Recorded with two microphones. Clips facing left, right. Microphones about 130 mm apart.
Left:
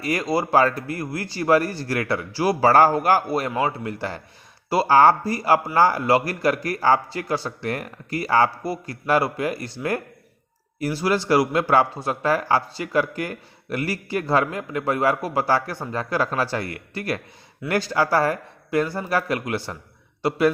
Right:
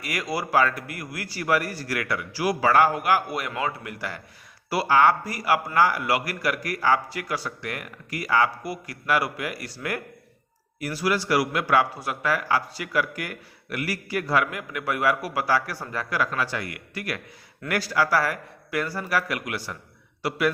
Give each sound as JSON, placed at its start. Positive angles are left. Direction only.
{"t": 0.0, "sound": "speech", "side_deg": 30}